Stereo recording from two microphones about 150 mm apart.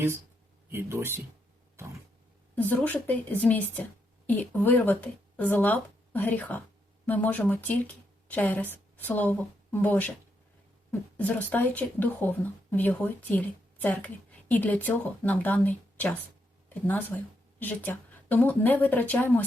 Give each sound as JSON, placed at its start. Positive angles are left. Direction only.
{"t": 0.7, "sound": "speech", "side_deg": -15}
{"t": 2.6, "sound": "a woman's voice", "side_deg": 10}
{"t": 11.2, "sound": "speech", "side_deg": 10}